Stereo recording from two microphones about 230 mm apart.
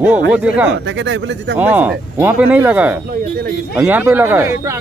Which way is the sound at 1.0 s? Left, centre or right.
Right.